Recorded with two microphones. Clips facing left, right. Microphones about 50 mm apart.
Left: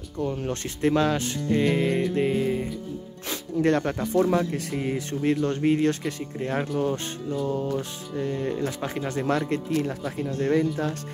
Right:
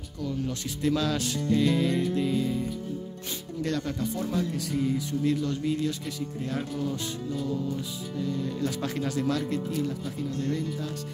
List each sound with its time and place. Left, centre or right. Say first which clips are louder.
0.2 s speech: left 4 dB; left
3.6 s speech: left 7 dB; left
4.0 s speech: left 7 dB; left
6.4 s speech: left 7 dB; left
8.5 s speech: left 1 dB; left
9.5 s speech: left 3 dB; left